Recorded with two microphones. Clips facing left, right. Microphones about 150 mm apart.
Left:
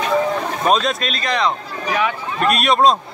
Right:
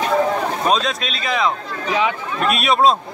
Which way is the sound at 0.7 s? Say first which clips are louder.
Left 4 dB; centre (ahead or behind).